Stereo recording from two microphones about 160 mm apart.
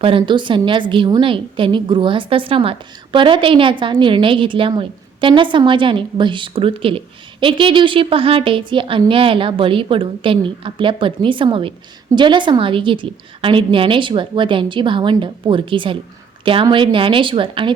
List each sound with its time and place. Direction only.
0.0 s a woman's voice: 35° right (ahead or behind)